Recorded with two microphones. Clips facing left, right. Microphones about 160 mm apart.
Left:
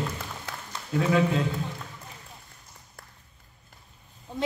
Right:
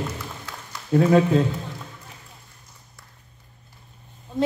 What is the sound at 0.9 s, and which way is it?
Speech, 45° right (ahead or behind).